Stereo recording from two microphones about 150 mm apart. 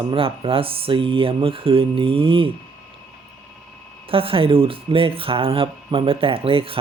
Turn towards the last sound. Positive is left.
turn(degrees=-35)  # may be behind; listen again after turning